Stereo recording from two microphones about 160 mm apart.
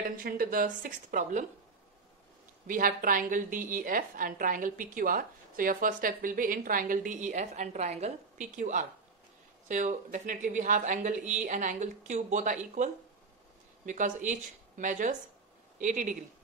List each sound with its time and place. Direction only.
0.2 s a woman's voice: 65° right (ahead or behind)
2.6 s a woman's voice: 60° right (ahead or behind)